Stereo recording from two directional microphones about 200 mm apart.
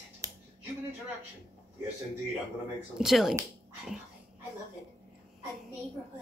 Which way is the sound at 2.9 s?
Centre (ahead or behind).